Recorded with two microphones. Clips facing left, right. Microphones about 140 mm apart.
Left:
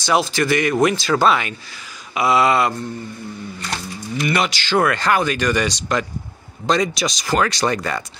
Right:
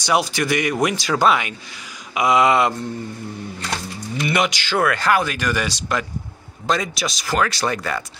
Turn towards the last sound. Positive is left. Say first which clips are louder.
# left 2 dB
turn(degrees=0)  # may be behind; listen again after turning